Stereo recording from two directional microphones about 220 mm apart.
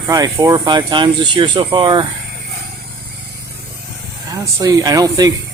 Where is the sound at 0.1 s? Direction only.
15° right (ahead or behind).